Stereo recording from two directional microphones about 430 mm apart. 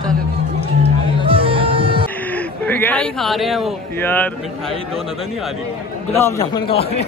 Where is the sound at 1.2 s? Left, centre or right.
Centre.